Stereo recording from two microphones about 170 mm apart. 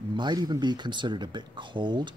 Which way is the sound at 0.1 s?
25° right (ahead or behind).